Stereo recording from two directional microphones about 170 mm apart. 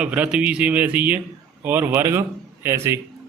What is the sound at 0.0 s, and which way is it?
A man's voice, 5° right (ahead or behind).